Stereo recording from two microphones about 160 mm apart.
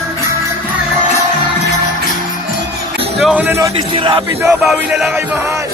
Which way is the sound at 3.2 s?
10° right (ahead or behind).